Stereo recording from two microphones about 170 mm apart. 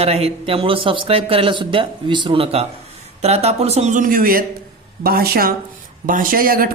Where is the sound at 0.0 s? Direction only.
35° right (ahead or behind).